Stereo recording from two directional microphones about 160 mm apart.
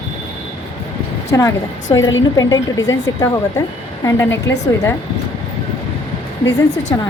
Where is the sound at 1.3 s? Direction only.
20° left (ahead or behind).